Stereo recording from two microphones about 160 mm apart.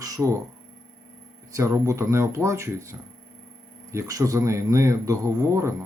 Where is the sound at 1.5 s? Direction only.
20° right (ahead or behind).